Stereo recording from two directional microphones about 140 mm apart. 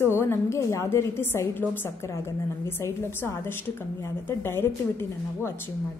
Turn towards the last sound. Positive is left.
turn(degrees=15)  # may be behind; listen again after turning